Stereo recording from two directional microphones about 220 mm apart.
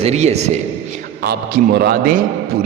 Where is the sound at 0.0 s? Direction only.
30° right (ahead or behind).